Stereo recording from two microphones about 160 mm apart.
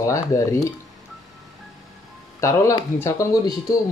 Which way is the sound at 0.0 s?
20° left (ahead or behind).